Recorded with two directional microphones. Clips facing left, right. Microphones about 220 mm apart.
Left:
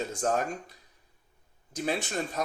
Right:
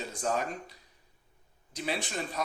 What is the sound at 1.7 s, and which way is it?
Speech, 45° left (ahead or behind).